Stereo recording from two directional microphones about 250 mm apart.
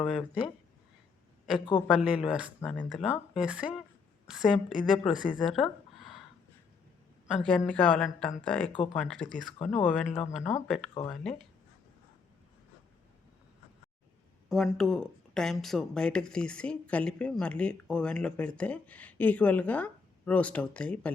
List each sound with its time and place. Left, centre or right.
0.0 s speech: centre
1.9 s speech: centre
5.4 s a sound: centre
7.4 s speech: centre
8.7 s speech: centre
9.0 s speech: centre
14.5 s speech: centre